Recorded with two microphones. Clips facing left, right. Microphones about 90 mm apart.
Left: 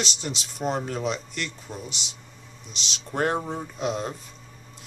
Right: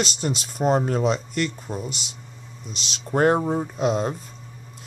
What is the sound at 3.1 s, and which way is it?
Speech, 40° right (ahead or behind).